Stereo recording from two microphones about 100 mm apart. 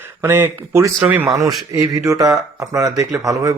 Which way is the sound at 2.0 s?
35° right (ahead or behind).